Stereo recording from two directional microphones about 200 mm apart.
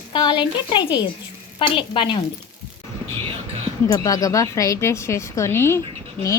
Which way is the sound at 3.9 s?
15° left (ahead or behind).